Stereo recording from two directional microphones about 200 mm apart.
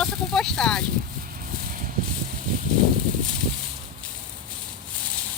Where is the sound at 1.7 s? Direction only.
45° right (ahead or behind).